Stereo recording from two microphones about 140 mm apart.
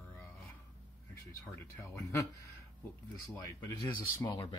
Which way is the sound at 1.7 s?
20° left (ahead or behind).